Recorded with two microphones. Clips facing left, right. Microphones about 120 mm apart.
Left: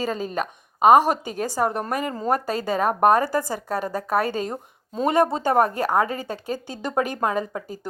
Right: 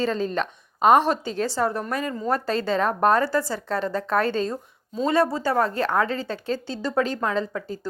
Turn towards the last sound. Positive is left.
turn(degrees=15)  # may be behind; listen again after turning